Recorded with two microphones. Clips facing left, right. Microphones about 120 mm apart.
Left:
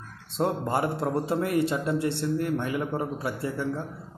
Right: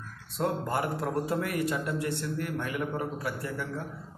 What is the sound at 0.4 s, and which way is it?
A man's voice, 25° left (ahead or behind).